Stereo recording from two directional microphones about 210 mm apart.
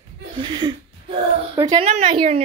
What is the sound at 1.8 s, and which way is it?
Speech, 30° right (ahead or behind).